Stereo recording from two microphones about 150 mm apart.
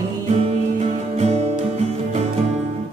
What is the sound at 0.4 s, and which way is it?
Music, 40° right (ahead or behind).